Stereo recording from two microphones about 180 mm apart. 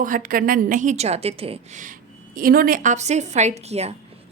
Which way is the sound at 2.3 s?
55° right (ahead or behind).